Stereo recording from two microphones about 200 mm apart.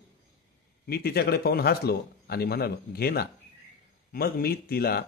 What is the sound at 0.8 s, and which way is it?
A man's voice, 50° left (ahead or behind).